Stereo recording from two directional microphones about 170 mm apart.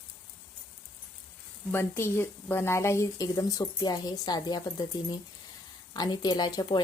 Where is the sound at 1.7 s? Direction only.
15° left (ahead or behind).